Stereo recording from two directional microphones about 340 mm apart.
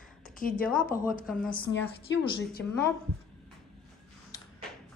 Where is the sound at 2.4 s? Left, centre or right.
Left.